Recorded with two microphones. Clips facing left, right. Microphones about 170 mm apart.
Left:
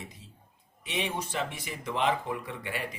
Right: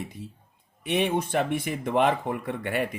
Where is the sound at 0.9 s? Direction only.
55° right (ahead or behind).